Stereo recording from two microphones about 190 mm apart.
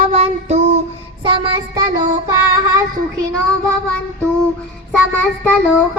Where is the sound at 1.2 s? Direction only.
25° right (ahead or behind).